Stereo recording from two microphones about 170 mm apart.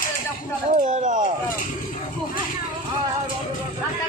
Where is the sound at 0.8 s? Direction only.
50° right (ahead or behind).